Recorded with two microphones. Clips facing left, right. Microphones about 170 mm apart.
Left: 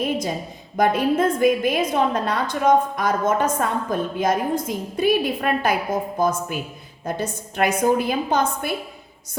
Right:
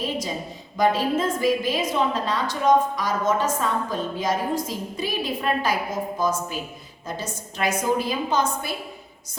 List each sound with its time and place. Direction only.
0.0 s a woman's voice: 55° left (ahead or behind)